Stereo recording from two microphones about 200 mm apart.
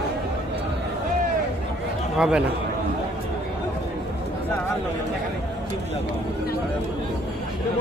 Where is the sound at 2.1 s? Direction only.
5° right (ahead or behind).